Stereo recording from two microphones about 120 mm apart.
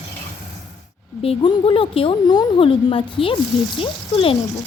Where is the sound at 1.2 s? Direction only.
50° left (ahead or behind).